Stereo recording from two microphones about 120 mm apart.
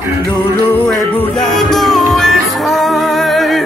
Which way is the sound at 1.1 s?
15° left (ahead or behind).